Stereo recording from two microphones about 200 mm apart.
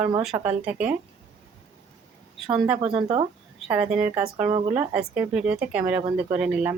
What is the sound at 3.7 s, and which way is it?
Speech, 5° right (ahead or behind).